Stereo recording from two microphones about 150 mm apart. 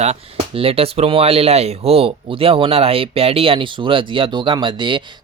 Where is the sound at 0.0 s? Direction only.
45° right (ahead or behind).